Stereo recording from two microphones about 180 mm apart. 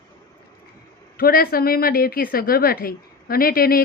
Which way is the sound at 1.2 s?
55° left (ahead or behind).